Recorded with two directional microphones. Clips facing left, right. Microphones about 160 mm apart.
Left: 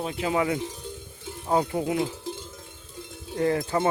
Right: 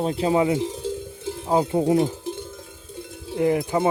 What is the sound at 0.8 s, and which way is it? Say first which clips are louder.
Cowbell: right 11 dB; 90° right.